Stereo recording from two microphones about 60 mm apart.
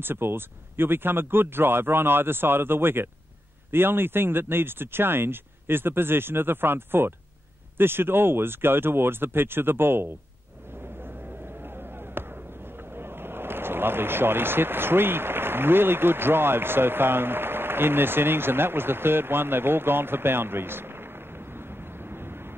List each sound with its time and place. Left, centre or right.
0.0 s speech: right
11.6 s a sound: right
12.9 s speech: right